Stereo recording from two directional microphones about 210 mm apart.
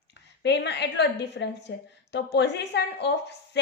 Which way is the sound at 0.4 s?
55° left (ahead or behind).